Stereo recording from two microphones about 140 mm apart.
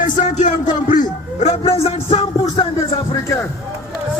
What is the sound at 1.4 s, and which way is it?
Speech, 55° left (ahead or behind).